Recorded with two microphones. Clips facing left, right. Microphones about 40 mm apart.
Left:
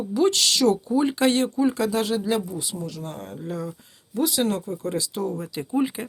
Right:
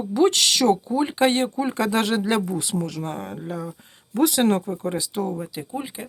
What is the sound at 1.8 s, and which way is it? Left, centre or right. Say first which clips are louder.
Speech: right 2 dB; right.